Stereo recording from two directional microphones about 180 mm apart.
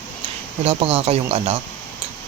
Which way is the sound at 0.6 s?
35° right (ahead or behind).